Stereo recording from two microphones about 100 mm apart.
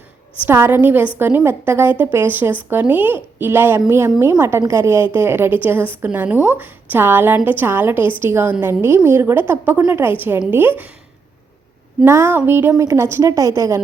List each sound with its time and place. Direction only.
0.4 s a woman's voice: 25° right (ahead or behind)
12.0 s a woman's voice: 25° right (ahead or behind)